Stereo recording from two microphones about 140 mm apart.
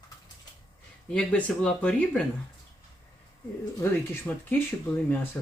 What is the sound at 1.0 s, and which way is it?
Speech, 5° left (ahead or behind).